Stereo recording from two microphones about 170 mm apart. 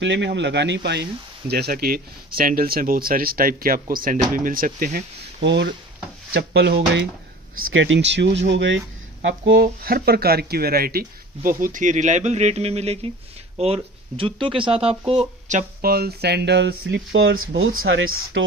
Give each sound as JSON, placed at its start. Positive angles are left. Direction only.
{"t": 0.0, "sound": "speech", "side_deg": -90}
{"t": 1.5, "sound": "speech", "side_deg": -65}
{"t": 6.3, "sound": "speech", "side_deg": -70}
{"t": 9.5, "sound": "speech", "side_deg": -60}
{"t": 15.9, "sound": "speech", "side_deg": -65}